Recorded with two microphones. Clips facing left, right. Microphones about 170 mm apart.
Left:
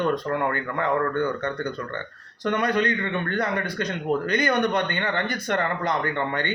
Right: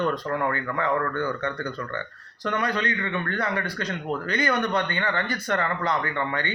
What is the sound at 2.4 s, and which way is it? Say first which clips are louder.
A man's voice: left 3 dB; 20° left (ahead or behind).